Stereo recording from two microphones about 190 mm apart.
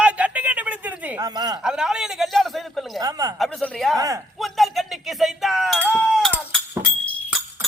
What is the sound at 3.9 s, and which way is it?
Speech, 20° right (ahead or behind).